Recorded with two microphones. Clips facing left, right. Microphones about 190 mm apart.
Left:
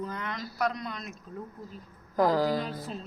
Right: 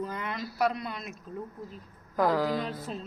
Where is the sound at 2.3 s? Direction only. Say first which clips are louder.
Left 1 dB; 30° left (ahead or behind).